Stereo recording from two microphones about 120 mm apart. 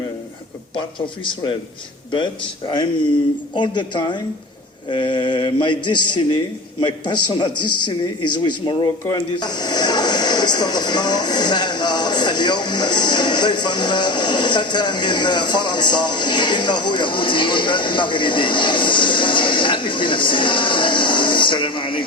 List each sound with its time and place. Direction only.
0.8 s a man's voice: 45° left (ahead or behind)
3.5 s speech: 40° left (ahead or behind)